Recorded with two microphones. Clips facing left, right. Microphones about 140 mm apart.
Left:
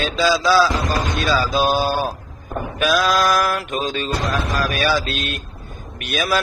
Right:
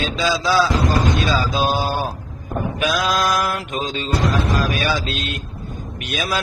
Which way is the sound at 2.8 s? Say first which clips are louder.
Left 3 dB; 15° right (ahead or behind).